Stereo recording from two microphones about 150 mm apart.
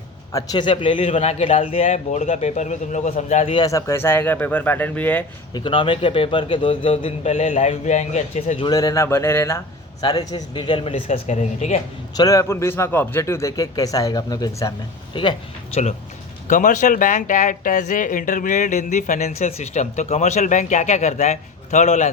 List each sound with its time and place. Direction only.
0.3 s a man's voice: 25° left (ahead or behind); by 3.5 s 50° left (ahead or behind)
3.5 s speech: 25° left (ahead or behind)
5.5 s a man's voice: 35° left (ahead or behind); by 8.6 s 50° left (ahead or behind)
8.6 s a man's voice: 25° left (ahead or behind)
11.3 s speech: 45° left (ahead or behind)
12.1 s a man's voice: 25° left (ahead or behind)
16.5 s speech: 60° left (ahead or behind)